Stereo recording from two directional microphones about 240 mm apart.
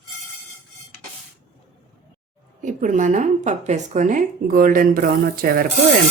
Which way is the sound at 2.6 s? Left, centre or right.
Right.